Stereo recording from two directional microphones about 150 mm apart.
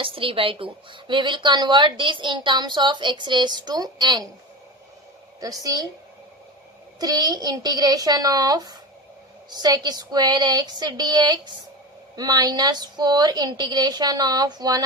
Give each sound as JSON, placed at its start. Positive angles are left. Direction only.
{"t": 0.0, "sound": "a woman's voice", "side_deg": -35}
{"t": 5.4, "sound": "a woman's voice", "side_deg": -25}
{"t": 7.0, "sound": "a woman's voice", "side_deg": -25}